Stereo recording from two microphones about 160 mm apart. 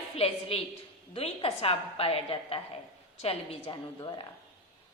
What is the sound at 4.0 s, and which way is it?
Speech, 25° left (ahead or behind).